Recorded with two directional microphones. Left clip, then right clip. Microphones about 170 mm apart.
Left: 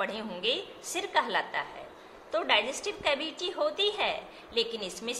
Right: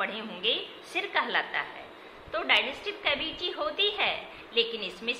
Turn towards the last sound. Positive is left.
turn(degrees=45)  # may be behind; listen again after turning